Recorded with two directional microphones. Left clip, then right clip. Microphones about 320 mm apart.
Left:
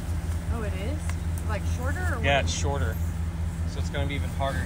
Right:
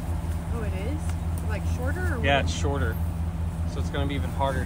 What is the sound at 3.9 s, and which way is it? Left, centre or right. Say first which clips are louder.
Speech: right 1 dB; centre.